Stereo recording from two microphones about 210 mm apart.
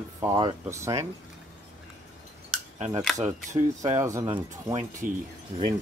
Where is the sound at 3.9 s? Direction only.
15° right (ahead or behind).